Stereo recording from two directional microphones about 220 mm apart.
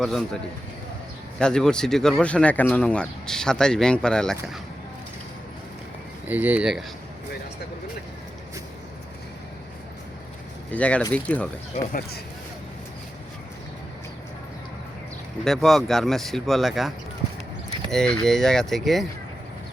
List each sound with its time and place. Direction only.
1.4 s speech: 5° left (ahead or behind)
6.2 s speech: 5° right (ahead or behind)
10.7 s speech: 5° left (ahead or behind)
11.9 s speech: 40° left (ahead or behind)
15.4 s speech: centre (ahead or behind)
17.9 s speech: 5° left (ahead or behind)